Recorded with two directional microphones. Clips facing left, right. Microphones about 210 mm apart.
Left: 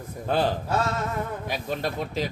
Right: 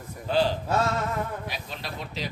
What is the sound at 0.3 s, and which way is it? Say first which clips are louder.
Speech: even; 50° left (ahead or behind).